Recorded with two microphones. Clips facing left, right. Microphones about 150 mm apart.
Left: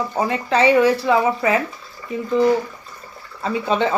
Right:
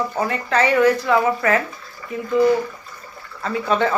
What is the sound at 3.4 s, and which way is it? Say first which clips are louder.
Speech: even; 20° left (ahead or behind).